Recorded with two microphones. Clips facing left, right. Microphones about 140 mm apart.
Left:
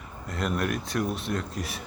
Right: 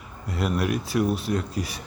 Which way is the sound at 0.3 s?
5° right (ahead or behind).